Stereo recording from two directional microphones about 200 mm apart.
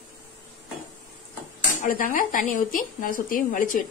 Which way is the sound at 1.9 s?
40° left (ahead or behind).